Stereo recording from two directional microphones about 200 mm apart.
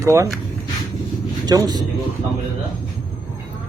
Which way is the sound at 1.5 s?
20° right (ahead or behind).